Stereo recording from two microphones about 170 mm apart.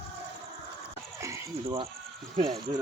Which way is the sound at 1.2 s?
15° right (ahead or behind).